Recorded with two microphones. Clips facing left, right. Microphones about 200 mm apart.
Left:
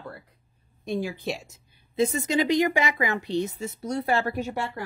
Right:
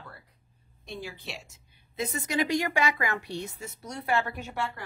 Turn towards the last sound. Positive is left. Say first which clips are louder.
# left 4 dB
turn(degrees=35)  # may be behind; listen again after turning